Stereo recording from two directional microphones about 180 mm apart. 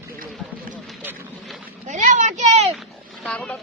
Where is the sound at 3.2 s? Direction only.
5° left (ahead or behind).